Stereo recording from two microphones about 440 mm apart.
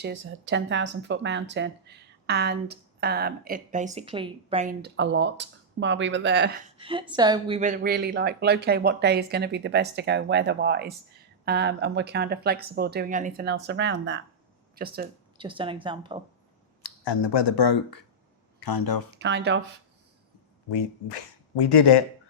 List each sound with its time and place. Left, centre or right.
0.0 s speech: right
6.7 s speech: centre
17.1 s speech: left
19.1 s speech: right
20.7 s speech: left